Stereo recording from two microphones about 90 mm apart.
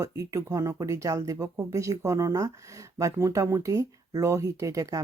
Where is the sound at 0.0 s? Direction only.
40° right (ahead or behind).